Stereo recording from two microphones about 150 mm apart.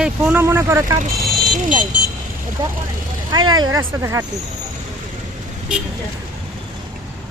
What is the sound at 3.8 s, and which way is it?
Speech, 15° right (ahead or behind).